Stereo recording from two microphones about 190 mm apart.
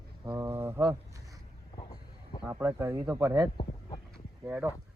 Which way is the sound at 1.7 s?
20° left (ahead or behind).